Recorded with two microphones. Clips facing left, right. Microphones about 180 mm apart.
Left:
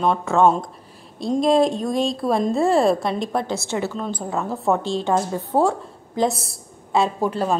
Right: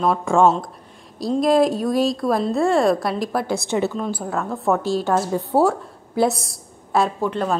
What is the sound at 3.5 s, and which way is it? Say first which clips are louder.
Speech: right 3 dB; 15° right (ahead or behind).